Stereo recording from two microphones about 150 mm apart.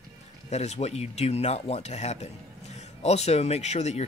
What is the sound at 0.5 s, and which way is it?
Speech, 50° left (ahead or behind).